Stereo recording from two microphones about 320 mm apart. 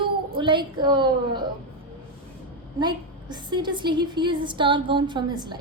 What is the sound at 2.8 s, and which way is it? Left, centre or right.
A woman's voice, centre.